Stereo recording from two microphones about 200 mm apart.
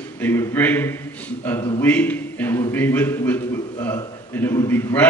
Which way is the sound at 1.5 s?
20° left (ahead or behind).